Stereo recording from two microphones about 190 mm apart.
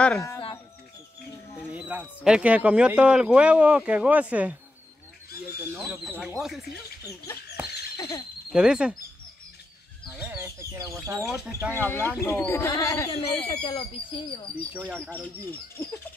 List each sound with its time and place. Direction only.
1.7 s speech: 5° right (ahead or behind)
5.7 s speech: 10° right (ahead or behind)
7.6 s a sound: 10° right (ahead or behind)
8.5 s speech: 5° right (ahead or behind)
10.1 s fowl: 10° right (ahead or behind)
10.7 s speech: 15° right (ahead or behind)
11.8 s speech: 10° left (ahead or behind)
13.1 s speech: 30° left (ahead or behind)
15.0 s speech: 10° left (ahead or behind)